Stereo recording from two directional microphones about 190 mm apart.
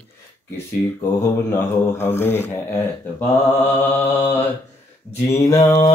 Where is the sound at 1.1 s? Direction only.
15° left (ahead or behind).